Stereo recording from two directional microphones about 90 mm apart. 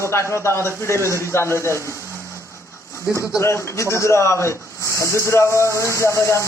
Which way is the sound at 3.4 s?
30° left (ahead or behind).